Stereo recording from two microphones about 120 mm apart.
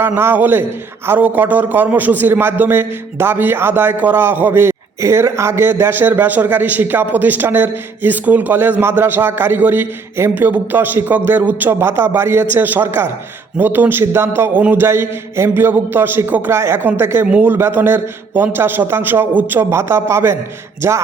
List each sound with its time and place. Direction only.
0.0 s a man's voice: 20° right (ahead or behind)